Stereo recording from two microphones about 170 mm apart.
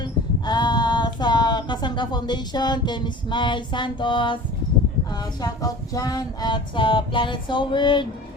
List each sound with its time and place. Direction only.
0.0 s female singing: 25° left (ahead or behind)
5.4 s female singing: 20° left (ahead or behind)